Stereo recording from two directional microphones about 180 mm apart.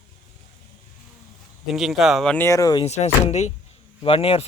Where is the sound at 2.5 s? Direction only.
20° left (ahead or behind).